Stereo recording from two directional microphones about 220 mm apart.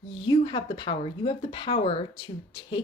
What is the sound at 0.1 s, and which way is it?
Speech, 20° left (ahead or behind).